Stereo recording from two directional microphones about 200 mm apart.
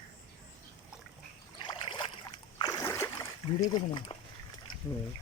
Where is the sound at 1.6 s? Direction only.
25° left (ahead or behind).